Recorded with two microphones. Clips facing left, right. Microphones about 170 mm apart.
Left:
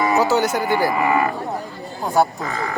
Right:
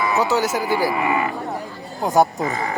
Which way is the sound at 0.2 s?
Centre (ahead or behind).